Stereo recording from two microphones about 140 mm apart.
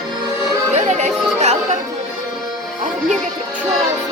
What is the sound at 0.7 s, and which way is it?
Music, 55° right (ahead or behind).